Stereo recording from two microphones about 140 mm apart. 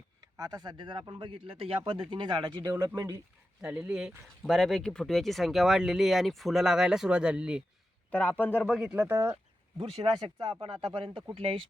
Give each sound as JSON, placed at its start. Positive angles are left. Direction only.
{"t": 0.2, "sound": "speech", "side_deg": -25}
{"t": 3.6, "sound": "speech", "side_deg": -5}
{"t": 8.1, "sound": "a man's voice", "side_deg": 10}
{"t": 8.6, "sound": "speech", "side_deg": 0}
{"t": 9.7, "sound": "speech", "side_deg": -40}